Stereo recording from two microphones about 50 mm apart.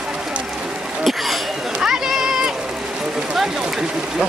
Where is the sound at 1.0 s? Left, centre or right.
Centre.